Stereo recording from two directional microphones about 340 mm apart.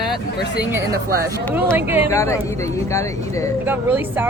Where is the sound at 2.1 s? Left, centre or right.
Centre.